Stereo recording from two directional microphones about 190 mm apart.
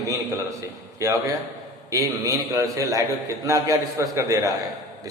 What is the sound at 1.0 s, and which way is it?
A man's voice, 15° right (ahead or behind).